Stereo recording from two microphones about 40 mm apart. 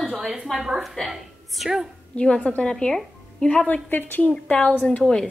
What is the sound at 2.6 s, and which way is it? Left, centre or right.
Speech, centre.